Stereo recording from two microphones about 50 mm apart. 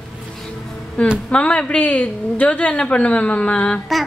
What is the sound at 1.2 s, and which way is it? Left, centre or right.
A woman's voice, left.